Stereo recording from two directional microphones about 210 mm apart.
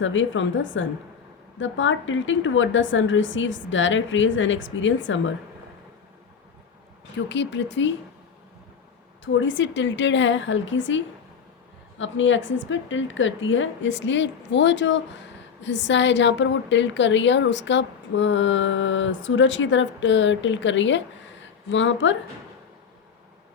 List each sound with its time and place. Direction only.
0.0 s a woman's voice: 65° left (ahead or behind)
7.3 s a woman's voice: 60° left (ahead or behind)
9.2 s a woman's voice: 60° left (ahead or behind)